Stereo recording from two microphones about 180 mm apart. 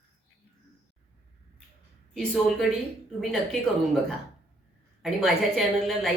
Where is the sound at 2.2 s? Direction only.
5° left (ahead or behind).